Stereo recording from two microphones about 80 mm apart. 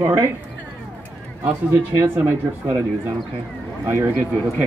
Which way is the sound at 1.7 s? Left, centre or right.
Right.